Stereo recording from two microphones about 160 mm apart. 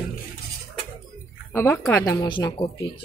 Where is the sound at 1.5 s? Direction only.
15° left (ahead or behind).